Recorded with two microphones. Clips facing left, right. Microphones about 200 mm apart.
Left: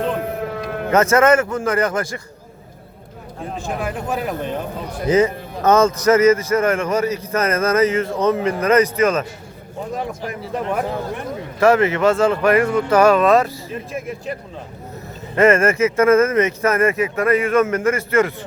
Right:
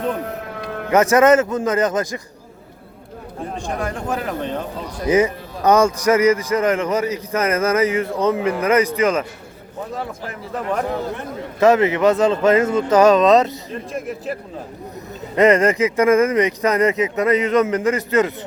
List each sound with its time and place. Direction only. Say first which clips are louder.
0.9 s a man's voice: right 1 dB; 15° right (ahead or behind)
3.6 s speech: left 1 dB; 5° left (ahead or behind)
5.0 s a man's voice: left 1 dB; 10° right (ahead or behind)
9.9 s speech: left 4 dB; 15° left (ahead or behind)
11.6 s speech: right 1 dB; 20° right (ahead or behind)
13.9 s speech: right 2 dB; centre (ahead or behind)
15.4 s a man's voice: even; 15° right (ahead or behind)